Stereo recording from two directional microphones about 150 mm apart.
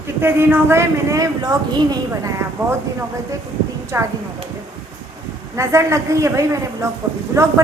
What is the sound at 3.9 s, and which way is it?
Speech, 20° right (ahead or behind).